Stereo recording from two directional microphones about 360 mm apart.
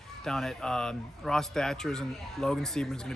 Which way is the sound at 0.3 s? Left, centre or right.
Centre.